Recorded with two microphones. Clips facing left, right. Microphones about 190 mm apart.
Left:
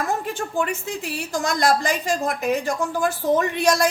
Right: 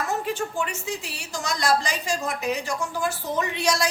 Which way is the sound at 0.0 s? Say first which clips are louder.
Left 1 dB; 50° left (ahead or behind).